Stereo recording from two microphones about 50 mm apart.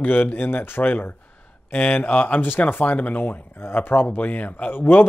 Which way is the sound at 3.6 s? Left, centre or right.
Left.